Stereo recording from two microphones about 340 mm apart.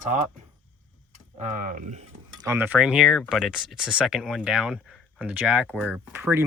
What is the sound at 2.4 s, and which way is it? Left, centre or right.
Speech, centre.